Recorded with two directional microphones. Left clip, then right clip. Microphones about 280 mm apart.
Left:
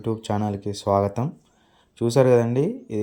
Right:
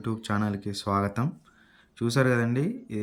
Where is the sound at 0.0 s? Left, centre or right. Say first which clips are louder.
Left 5 dB; centre.